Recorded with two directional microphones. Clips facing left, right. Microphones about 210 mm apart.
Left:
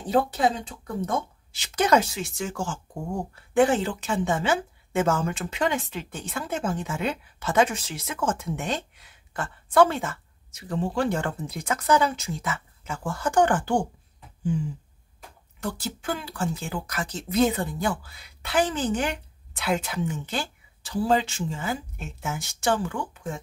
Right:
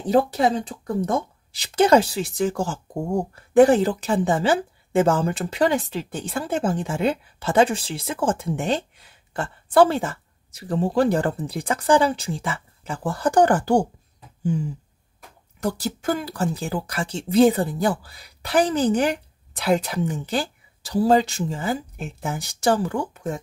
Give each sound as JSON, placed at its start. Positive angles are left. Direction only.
{"t": 0.0, "sound": "a woman's voice", "side_deg": -35}
{"t": 15.6, "sound": "a woman's voice", "side_deg": -40}